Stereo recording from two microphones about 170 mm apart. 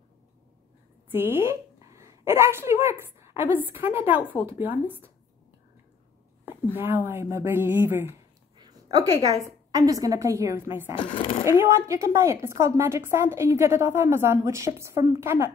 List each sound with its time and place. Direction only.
1.1 s a woman's voice: 15° right (ahead or behind)
7.1 s a woman's voice: 15° right (ahead or behind)
8.5 s a woman's voice: 25° right (ahead or behind)
11.0 s speech: 30° left (ahead or behind)
11.4 s a woman's voice: 15° right (ahead or behind)